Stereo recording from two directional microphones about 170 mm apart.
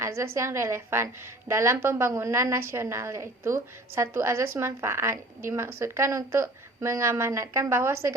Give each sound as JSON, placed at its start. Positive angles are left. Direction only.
{"t": 0.0, "sound": "a woman's voice", "side_deg": -15}